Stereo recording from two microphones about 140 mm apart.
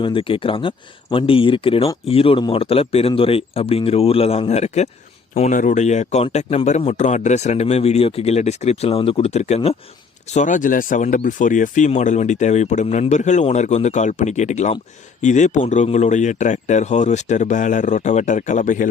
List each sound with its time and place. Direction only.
0.0 s speech: 40° left (ahead or behind)
5.4 s speech: 65° left (ahead or behind)
10.3 s speech: 65° left (ahead or behind)